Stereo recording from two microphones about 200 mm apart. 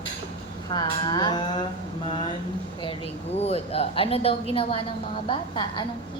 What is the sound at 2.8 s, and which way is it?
A woman's voice, 30° left (ahead or behind).